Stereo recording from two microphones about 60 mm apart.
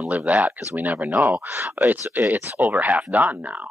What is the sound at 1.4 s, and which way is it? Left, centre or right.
Speech, right.